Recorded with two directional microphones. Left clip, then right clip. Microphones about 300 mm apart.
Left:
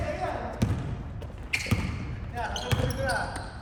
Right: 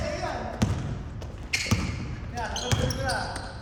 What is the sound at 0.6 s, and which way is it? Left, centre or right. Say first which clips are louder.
Trickle: right 2 dB; centre.